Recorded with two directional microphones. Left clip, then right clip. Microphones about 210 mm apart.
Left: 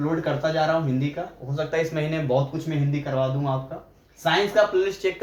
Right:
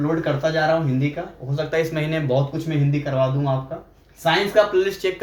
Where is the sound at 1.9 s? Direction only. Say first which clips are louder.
Right 2 dB; 20° right (ahead or behind).